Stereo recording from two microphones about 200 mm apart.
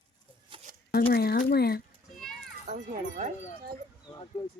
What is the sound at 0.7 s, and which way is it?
Shuffling cards, 45° right (ahead or behind).